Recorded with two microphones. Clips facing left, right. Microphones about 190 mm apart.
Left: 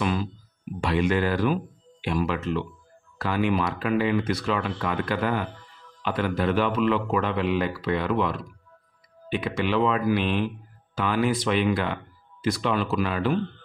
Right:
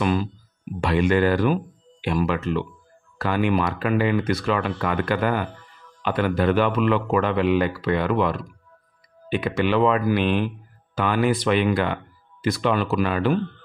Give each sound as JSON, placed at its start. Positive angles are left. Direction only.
{"t": 0.0, "sound": "speech", "side_deg": -50}